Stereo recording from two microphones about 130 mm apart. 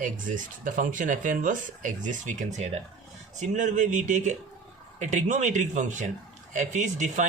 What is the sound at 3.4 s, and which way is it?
Speech, 75° right (ahead or behind).